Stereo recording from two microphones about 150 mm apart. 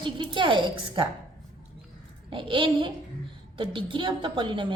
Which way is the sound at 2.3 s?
35° right (ahead or behind).